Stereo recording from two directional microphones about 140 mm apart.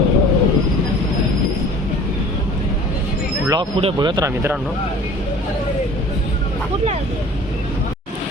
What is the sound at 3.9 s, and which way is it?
Speech, 30° right (ahead or behind).